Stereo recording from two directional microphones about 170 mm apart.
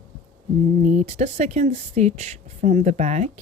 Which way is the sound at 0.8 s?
40° right (ahead or behind).